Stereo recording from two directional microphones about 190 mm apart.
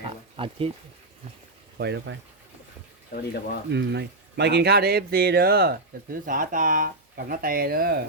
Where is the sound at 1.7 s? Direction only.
65° right (ahead or behind).